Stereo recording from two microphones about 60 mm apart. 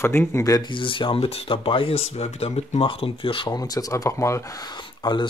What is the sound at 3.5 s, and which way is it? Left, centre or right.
Speech, left.